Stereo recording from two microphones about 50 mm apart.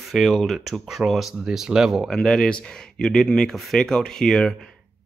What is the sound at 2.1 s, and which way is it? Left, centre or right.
Speech, centre.